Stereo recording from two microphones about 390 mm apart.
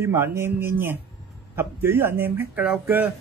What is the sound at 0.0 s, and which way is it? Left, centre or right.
Speech, centre.